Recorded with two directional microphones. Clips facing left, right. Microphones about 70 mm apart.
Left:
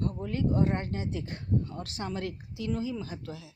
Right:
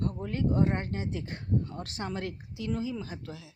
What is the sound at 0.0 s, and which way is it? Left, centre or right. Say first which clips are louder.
Speech: even; right.